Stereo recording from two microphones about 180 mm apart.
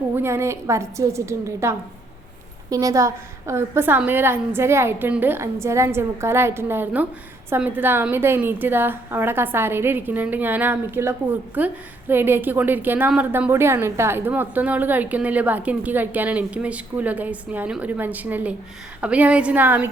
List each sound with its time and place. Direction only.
0.1 s a woman's voice: 15° right (ahead or behind)